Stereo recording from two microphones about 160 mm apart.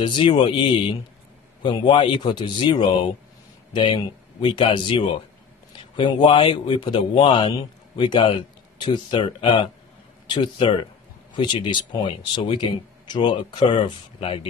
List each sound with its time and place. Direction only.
0.0 s a man's voice: 30° left (ahead or behind)